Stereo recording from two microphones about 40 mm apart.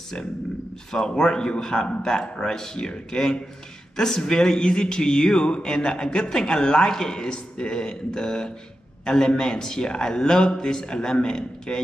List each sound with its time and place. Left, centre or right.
0.9 s a man's voice: centre